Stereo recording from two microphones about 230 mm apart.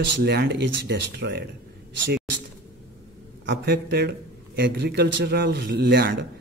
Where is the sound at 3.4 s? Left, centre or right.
Right.